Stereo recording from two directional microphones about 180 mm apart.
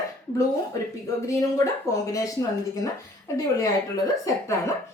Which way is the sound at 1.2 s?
20° left (ahead or behind).